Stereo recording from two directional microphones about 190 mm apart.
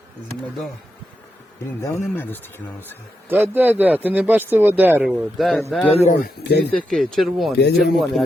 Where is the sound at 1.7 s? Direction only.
15° left (ahead or behind).